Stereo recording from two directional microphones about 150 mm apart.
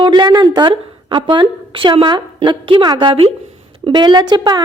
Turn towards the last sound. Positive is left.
turn(degrees=-30)  # may be behind; listen again after turning